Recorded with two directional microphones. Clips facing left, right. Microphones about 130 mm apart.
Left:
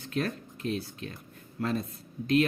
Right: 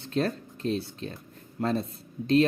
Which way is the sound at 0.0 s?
30° right (ahead or behind).